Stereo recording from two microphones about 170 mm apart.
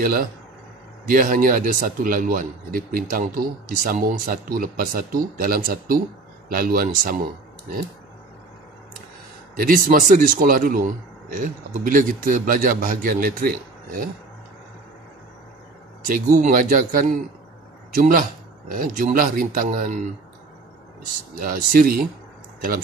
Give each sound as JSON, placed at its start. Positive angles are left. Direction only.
{"t": 0.0, "sound": "a man's voice", "side_deg": -60}
{"t": 9.6, "sound": "a man's voice", "side_deg": -55}
{"t": 16.1, "sound": "a man's voice", "side_deg": -50}
{"t": 21.4, "sound": "a man's voice", "side_deg": -55}